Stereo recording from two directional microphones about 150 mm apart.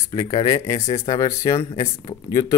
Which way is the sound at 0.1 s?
25° left (ahead or behind).